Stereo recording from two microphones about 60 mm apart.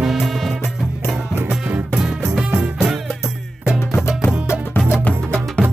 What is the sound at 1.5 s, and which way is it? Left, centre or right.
Music, centre.